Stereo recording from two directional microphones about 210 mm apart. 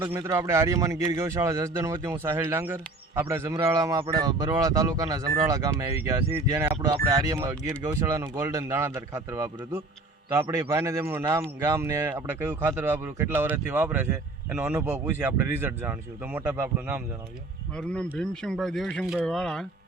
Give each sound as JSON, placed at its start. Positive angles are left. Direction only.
{"t": 0.0, "sound": "speech", "side_deg": -15}
{"t": 17.7, "sound": "speech", "side_deg": 5}